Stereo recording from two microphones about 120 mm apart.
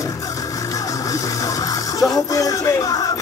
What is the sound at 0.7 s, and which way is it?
Music, 30° left (ahead or behind).